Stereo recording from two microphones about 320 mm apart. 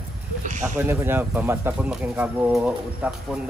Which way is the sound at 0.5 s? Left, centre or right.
Right.